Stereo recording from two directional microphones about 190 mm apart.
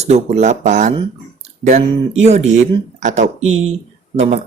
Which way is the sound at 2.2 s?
35° right (ahead or behind).